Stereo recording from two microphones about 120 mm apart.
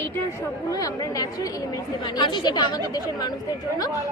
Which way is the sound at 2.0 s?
40° left (ahead or behind).